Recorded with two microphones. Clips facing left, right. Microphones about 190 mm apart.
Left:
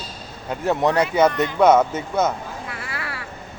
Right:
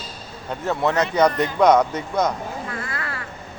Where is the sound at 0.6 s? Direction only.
15° left (ahead or behind).